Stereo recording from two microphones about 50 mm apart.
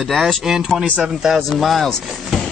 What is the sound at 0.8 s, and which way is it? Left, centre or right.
Speech, right.